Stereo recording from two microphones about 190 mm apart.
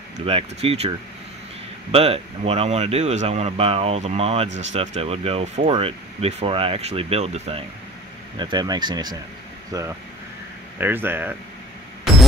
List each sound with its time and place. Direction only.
0.2 s speech: 30° right (ahead or behind); by 11.3 s 10° right (ahead or behind)